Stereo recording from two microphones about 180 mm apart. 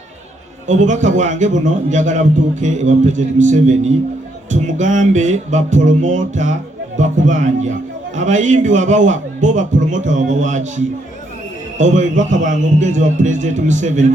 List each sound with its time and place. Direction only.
0.7 s speech: 40° right (ahead or behind)